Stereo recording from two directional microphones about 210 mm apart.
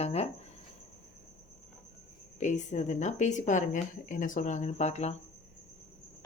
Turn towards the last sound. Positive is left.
turn(degrees=30)  # may be behind; listen again after turning